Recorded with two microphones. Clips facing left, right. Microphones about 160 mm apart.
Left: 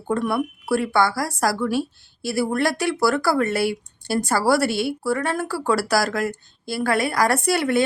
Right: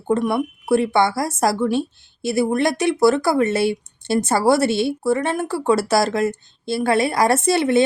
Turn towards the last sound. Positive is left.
turn(degrees=-25)  # may be behind; listen again after turning